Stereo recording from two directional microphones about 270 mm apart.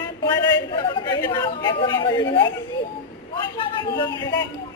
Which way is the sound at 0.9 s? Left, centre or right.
Centre.